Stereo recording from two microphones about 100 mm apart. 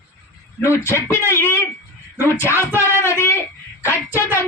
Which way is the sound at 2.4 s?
25° left (ahead or behind).